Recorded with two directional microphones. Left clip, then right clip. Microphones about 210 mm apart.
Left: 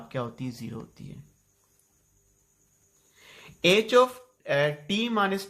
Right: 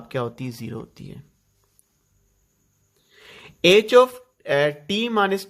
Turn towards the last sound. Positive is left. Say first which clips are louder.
# right 5 dB
turn(degrees=-40)  # may be behind; listen again after turning